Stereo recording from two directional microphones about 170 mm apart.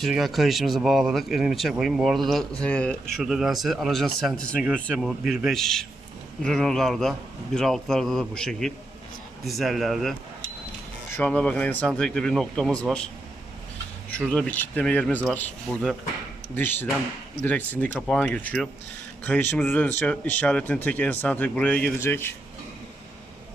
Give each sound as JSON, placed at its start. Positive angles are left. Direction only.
{"t": 0.0, "sound": "speech", "side_deg": 0}
{"t": 14.3, "sound": "speech", "side_deg": 10}